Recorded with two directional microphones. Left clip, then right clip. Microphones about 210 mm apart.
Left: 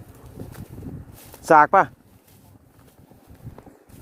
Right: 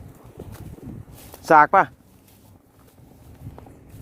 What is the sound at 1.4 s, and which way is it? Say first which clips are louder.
Speech: even; 10° left (ahead or behind).